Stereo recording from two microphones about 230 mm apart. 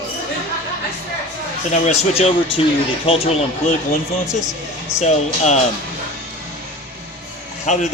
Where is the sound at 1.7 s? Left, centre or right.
Left.